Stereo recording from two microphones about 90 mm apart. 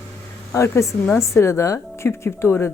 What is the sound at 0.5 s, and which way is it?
Speech, 35° left (ahead or behind).